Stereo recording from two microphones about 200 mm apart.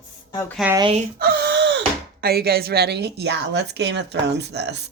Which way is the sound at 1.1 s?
55° right (ahead or behind).